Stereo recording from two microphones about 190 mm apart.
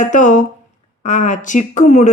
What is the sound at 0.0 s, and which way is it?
Speech, 40° left (ahead or behind).